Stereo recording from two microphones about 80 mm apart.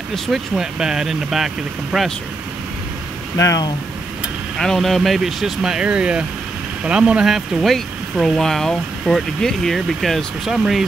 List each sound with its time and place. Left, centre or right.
0.1 s speech: centre
4.6 s speech: centre